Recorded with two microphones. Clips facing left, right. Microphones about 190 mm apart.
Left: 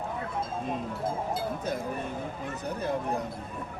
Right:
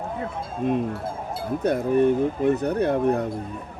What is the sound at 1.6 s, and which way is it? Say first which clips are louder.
Speech: right 13 dB; 65° right (ahead or behind).